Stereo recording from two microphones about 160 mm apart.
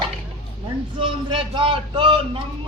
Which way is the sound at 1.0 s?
30° right (ahead or behind).